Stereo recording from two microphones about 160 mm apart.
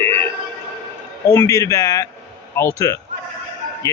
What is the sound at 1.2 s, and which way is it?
A man's voice, 15° left (ahead or behind).